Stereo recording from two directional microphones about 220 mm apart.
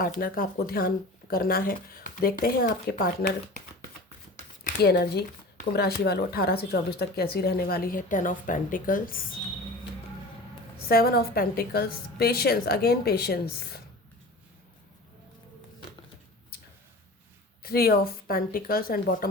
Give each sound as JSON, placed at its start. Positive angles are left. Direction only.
{"t": 0.0, "sound": "speech", "side_deg": 40}
{"t": 10.8, "sound": "speech", "side_deg": 45}
{"t": 16.5, "sound": "a sound", "side_deg": 45}
{"t": 17.6, "sound": "speech", "side_deg": 45}